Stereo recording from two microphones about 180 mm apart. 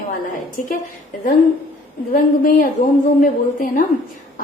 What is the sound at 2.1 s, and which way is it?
A woman's voice, 50° left (ahead or behind).